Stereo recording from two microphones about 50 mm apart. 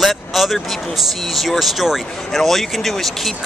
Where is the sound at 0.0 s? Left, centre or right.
Centre.